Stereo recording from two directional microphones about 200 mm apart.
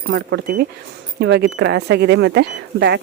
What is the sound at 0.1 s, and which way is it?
Speech, 55° right (ahead or behind).